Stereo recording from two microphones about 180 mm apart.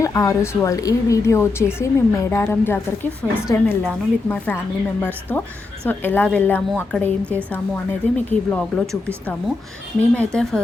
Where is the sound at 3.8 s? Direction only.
5° left (ahead or behind).